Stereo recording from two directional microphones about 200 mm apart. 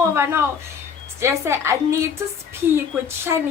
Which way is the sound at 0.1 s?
10° right (ahead or behind).